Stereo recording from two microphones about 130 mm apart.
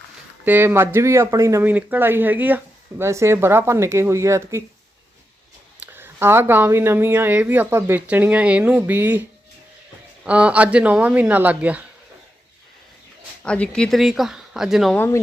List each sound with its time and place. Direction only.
0.4 s speech: 15° right (ahead or behind)
5.8 s speech: 15° right (ahead or behind)
10.2 s speech: 10° right (ahead or behind)
13.4 s speech: 10° left (ahead or behind)
14.9 s speech: 15° left (ahead or behind)